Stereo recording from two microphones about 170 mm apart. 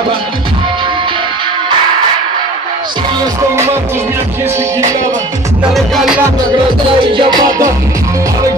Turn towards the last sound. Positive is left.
turn(degrees=-30)  # may be behind; listen again after turning